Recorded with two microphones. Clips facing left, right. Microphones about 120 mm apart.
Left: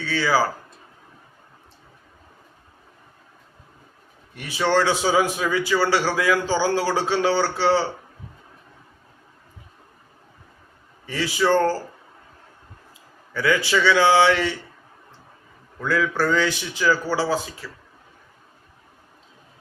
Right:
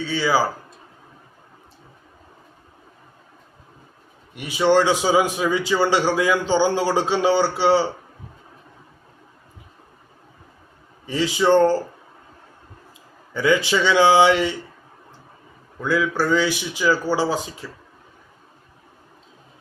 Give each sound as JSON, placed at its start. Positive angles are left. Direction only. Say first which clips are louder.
{"t": 0.0, "sound": "a man's voice", "louder": "right 1 dB", "side_deg": -15}
{"t": 4.4, "sound": "a man's voice", "louder": "right 4 dB", "side_deg": -15}
{"t": 11.0, "sound": "speech", "louder": "right 3 dB", "side_deg": -20}
{"t": 13.3, "sound": "speech", "louder": "right 2 dB", "side_deg": -20}
{"t": 15.8, "sound": "a man's voice", "louder": "right 1 dB", "side_deg": -15}